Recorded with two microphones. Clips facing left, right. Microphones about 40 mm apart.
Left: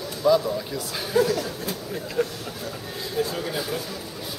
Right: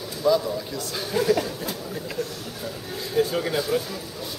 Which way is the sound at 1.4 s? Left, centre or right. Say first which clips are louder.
Even; centre.